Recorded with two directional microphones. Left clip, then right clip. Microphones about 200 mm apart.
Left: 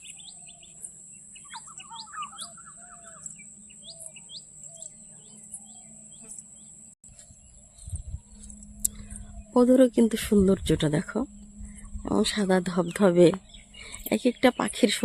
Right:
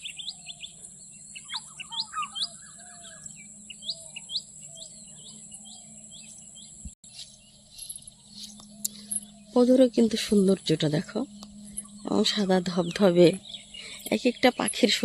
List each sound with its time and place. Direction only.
1.9 s bird: 45° left (ahead or behind)
9.5 s speech: 5° left (ahead or behind)